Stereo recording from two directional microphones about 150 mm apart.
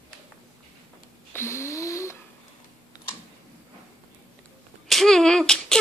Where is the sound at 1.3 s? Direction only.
20° left (ahead or behind).